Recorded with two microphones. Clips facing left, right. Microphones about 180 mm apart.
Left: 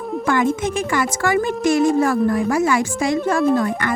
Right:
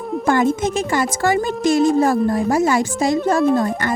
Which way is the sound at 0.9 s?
35° right (ahead or behind).